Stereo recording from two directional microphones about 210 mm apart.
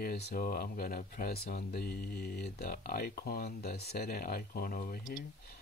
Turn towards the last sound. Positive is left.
turn(degrees=40)  # may be behind; listen again after turning